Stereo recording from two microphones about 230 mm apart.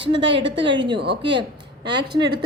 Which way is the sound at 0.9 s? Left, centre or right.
Right.